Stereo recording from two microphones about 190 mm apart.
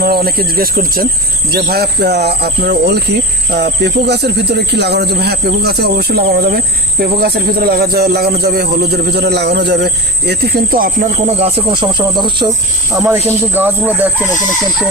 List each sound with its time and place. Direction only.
0.0 s a man's voice: 55° right (ahead or behind)
11.3 s speech: 30° right (ahead or behind); by 14.3 s 10° right (ahead or behind)